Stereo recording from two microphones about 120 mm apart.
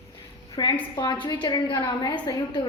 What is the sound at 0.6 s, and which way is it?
A woman's voice, 35° left (ahead or behind).